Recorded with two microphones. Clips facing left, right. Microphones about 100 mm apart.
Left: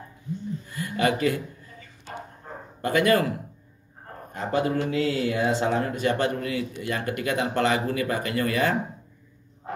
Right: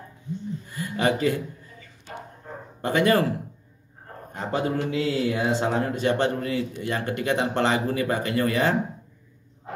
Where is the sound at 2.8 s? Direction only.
30° right (ahead or behind).